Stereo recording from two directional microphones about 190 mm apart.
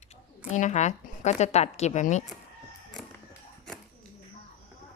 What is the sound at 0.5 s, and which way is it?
A woman's voice, 40° left (ahead or behind).